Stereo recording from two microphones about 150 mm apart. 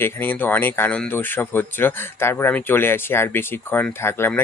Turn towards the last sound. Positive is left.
turn(degrees=15)  # may be behind; listen again after turning